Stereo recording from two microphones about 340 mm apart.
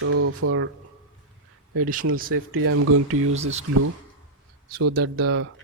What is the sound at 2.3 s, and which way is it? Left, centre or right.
Speech, right.